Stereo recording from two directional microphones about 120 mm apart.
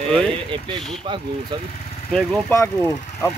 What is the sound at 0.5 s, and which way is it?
Speech, 45° right (ahead or behind).